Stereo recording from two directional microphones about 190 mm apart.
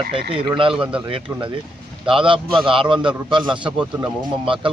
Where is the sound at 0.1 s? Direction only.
30° right (ahead or behind).